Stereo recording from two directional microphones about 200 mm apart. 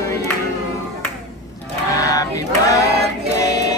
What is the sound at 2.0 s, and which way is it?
Choir, 15° left (ahead or behind).